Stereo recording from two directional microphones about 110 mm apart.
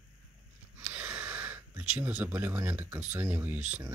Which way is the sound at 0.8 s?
10° right (ahead or behind).